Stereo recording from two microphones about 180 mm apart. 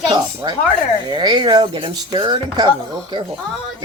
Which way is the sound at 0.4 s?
20° right (ahead or behind).